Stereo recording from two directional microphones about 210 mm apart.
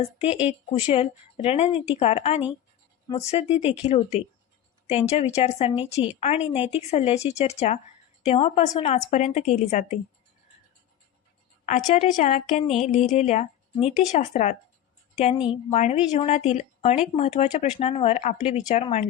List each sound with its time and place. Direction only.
0.0 s speech: 30° left (ahead or behind)
3.6 s speech: 5° right (ahead or behind)
3.8 s speech: 30° left (ahead or behind)
11.9 s a woman's voice: 35° left (ahead or behind)